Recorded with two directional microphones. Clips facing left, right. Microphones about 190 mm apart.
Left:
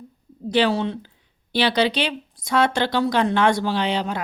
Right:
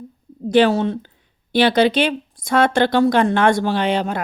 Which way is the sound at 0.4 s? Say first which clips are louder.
Right 5 dB; 50° right (ahead or behind).